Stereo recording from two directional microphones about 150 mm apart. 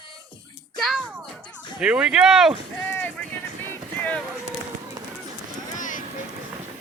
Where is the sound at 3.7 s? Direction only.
10° left (ahead or behind).